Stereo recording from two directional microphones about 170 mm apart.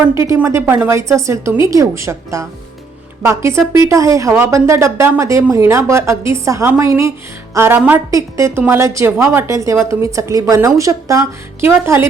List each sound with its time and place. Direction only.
0.1 s speech: 15° right (ahead or behind)